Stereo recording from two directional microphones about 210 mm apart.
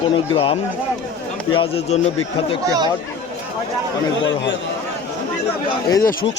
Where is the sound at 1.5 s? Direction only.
25° left (ahead or behind).